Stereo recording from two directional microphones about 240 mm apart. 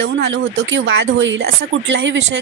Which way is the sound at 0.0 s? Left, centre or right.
Right.